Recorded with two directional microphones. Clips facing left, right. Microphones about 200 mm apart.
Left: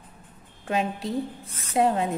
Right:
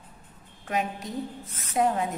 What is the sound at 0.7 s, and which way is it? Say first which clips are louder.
A woman's voice: left 3 dB; 30° left (ahead or behind).